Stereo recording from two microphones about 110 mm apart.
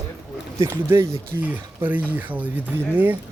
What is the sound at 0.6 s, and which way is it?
Speech, 20° right (ahead or behind).